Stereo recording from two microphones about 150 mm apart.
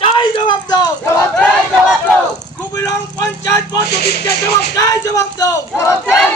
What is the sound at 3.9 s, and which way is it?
Music, 90° left.